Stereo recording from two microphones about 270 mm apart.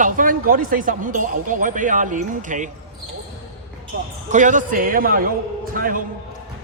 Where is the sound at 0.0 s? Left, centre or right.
Right.